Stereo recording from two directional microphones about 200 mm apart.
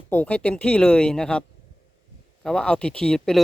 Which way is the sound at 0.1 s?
5° left (ahead or behind).